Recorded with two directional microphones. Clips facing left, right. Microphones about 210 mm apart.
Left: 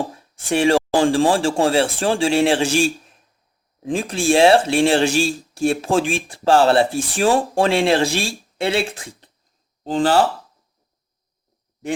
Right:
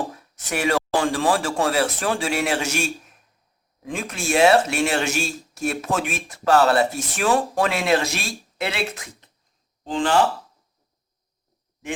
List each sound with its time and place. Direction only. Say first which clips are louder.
0.1 s speech: left 7 dB; 30° left (ahead or behind)